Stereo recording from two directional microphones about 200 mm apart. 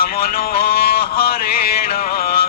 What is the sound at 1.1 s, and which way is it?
Music, 50° left (ahead or behind).